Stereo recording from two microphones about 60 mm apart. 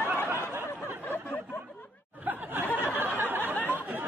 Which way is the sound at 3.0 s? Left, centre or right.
Right.